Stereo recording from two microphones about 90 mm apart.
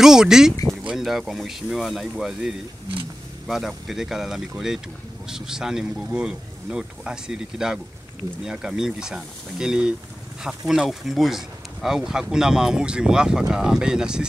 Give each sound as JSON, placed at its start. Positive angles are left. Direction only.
{"t": 0.0, "sound": "speech", "side_deg": -5}